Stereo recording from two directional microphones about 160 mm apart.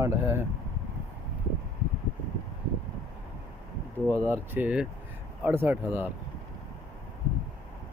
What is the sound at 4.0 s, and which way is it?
Speech, 15° right (ahead or behind).